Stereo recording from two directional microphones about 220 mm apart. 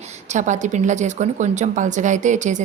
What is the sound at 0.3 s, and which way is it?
A woman's voice, 35° right (ahead or behind).